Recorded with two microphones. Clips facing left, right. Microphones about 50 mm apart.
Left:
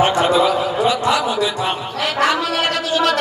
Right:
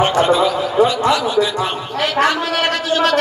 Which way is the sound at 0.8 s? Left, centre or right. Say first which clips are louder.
Right 5 dB; right.